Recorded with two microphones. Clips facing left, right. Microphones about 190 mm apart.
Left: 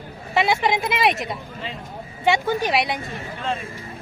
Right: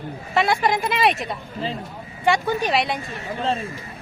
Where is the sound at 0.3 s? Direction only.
20° left (ahead or behind).